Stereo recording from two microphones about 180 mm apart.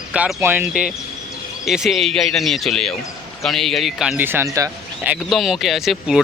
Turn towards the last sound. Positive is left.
turn(degrees=0)  # may be behind; listen again after turning